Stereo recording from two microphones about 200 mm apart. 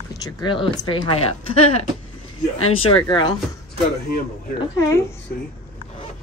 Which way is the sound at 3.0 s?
20° left (ahead or behind).